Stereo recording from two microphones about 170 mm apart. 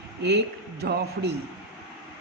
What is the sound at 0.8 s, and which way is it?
Speech, 75° right (ahead or behind).